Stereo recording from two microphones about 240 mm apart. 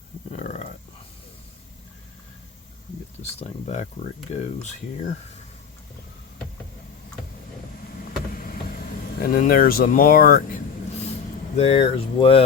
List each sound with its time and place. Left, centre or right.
0.3 s a sound: left
3.3 s speech: left
8.3 s vehicle: left
11.5 s speech: left